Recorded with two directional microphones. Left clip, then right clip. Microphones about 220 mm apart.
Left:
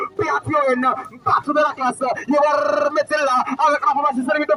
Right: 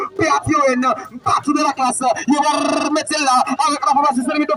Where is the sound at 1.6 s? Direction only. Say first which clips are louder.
Right 3 dB; 55° right (ahead or behind).